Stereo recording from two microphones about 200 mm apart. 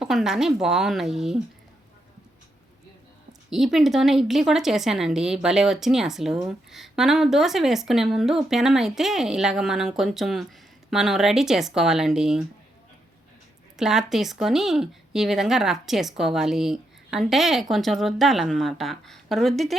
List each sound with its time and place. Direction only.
0.0 s a woman's voice: centre (ahead or behind)
3.5 s a woman's voice: centre (ahead or behind)
13.7 s a woman's voice: centre (ahead or behind)